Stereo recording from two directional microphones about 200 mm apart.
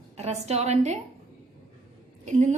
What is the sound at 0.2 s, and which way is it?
Speech, 30° right (ahead or behind).